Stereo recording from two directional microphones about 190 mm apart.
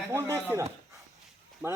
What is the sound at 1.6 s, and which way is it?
Speech, 10° right (ahead or behind).